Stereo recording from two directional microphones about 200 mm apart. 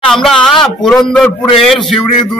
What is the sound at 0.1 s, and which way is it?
A man's voice, centre (ahead or behind).